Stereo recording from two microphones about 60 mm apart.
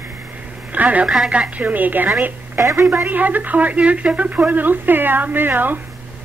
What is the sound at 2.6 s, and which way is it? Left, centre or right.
Speech, right.